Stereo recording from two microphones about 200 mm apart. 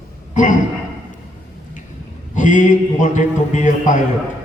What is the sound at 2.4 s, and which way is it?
A man's voice, 40° left (ahead or behind).